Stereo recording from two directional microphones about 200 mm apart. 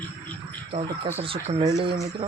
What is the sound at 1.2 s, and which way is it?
Speech, 25° right (ahead or behind).